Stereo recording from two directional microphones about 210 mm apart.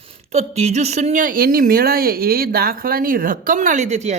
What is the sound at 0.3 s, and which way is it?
A man's voice, 30° right (ahead or behind).